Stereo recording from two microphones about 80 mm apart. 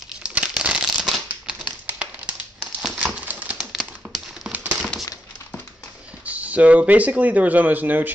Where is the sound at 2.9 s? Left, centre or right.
Centre.